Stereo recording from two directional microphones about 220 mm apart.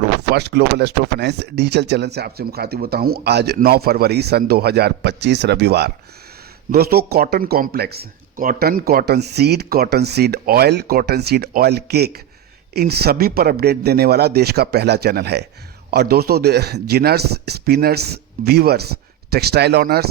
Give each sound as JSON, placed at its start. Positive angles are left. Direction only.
{"t": 0.2, "sound": "speech", "side_deg": -50}